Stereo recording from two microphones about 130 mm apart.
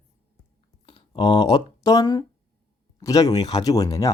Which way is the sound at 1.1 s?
35° left (ahead or behind).